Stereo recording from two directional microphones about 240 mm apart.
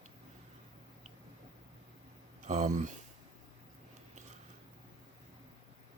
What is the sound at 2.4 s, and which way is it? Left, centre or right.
Speech, right.